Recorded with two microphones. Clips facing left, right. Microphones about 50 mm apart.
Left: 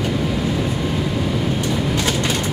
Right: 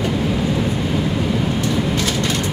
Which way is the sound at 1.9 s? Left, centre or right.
Centre.